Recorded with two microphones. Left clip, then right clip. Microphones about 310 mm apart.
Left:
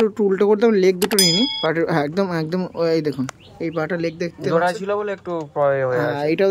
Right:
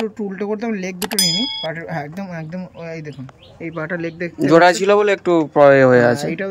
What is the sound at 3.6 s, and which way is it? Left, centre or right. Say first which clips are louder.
Speech: left 2 dB; centre.